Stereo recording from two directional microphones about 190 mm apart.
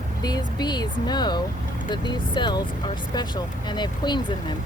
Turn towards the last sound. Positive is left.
turn(degrees=25)  # may be behind; listen again after turning